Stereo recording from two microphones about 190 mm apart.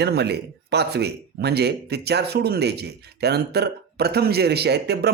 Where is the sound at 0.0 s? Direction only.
60° right (ahead or behind).